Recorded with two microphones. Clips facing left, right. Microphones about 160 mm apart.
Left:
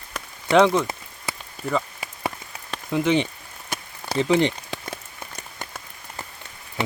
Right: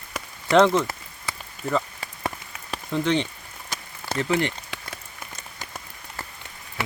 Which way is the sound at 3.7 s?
60° left (ahead or behind).